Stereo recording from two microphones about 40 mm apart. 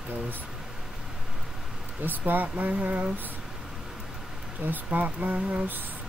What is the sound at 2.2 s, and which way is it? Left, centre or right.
Speech, right.